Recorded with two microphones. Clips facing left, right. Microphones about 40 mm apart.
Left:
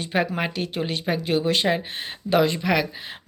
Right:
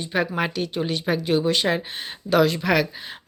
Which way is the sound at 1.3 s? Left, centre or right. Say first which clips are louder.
Even; left.